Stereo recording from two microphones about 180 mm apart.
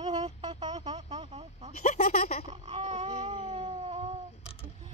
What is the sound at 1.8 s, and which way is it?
Speech, 40° left (ahead or behind).